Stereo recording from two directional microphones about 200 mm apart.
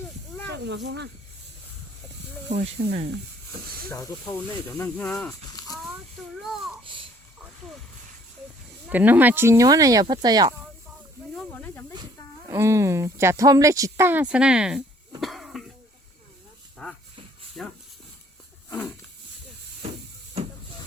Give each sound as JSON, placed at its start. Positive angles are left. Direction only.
{"t": 0.5, "sound": "speech", "side_deg": -60}
{"t": 2.5, "sound": "speech", "side_deg": -30}
{"t": 3.8, "sound": "speech", "side_deg": 15}
{"t": 8.9, "sound": "speech", "side_deg": -10}
{"t": 11.3, "sound": "snake", "side_deg": 10}
{"t": 12.5, "sound": "speech", "side_deg": -15}
{"t": 15.2, "sound": "cough", "side_deg": 0}
{"t": 17.6, "sound": "speech", "side_deg": 5}
{"t": 18.7, "sound": "wild animals", "side_deg": 10}